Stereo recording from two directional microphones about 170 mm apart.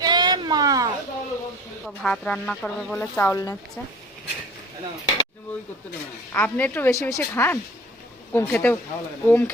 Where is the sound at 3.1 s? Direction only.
15° left (ahead or behind).